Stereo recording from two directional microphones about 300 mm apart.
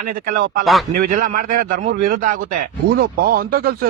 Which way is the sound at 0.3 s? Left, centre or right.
Right.